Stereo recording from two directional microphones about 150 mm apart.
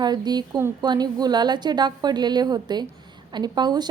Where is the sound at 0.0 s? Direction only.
25° right (ahead or behind).